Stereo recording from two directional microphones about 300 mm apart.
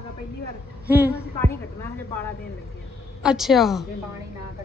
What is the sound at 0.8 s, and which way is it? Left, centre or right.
Speech, centre.